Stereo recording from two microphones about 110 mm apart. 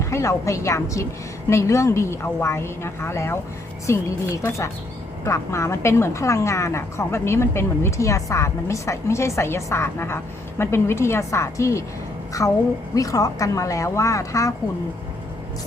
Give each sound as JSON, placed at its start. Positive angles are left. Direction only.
{"t": 0.0, "sound": "a woman's voice", "side_deg": 25}